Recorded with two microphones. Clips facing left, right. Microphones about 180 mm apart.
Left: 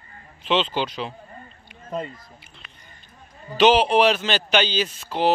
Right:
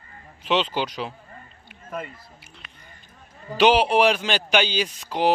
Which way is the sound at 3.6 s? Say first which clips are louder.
Left 1 dB; 10° right (ahead or behind).